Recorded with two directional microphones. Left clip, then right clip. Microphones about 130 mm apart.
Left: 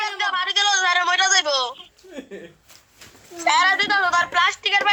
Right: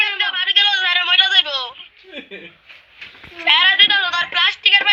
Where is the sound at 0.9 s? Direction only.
90° left.